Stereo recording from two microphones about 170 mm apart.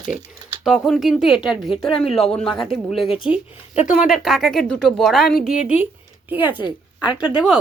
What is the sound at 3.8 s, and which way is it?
Speech, 50° left (ahead or behind).